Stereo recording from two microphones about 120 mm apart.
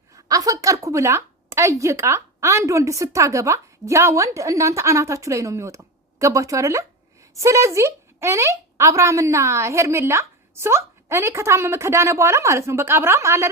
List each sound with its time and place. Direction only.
0.1 s a woman's voice: 30° right (ahead or behind)